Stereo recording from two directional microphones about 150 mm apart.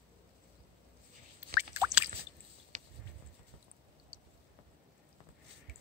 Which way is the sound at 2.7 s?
55° right (ahead or behind).